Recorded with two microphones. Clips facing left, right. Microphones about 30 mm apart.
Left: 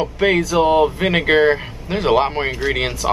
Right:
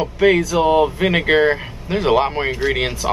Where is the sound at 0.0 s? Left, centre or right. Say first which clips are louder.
Right 2 dB; centre.